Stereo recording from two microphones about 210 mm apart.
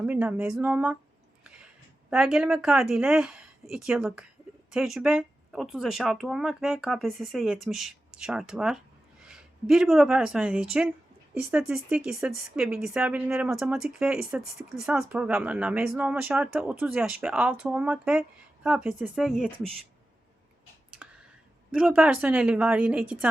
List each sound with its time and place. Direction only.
0.0 s speech: 5° right (ahead or behind)
21.0 s clicking: 5° right (ahead or behind)
21.7 s speech: 5° right (ahead or behind)